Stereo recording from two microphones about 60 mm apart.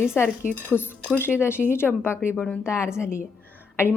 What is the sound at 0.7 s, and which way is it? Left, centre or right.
Speech, left.